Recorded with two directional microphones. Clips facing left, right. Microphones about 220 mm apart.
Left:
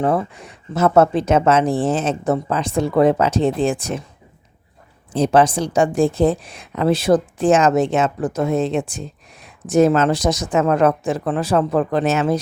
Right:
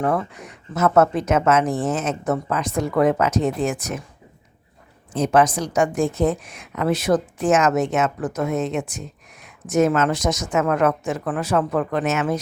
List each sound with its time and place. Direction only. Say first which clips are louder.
0.0 s speech: left 3 dB; 30° left (ahead or behind)
5.1 s a woman's voice: left 3 dB; 30° left (ahead or behind)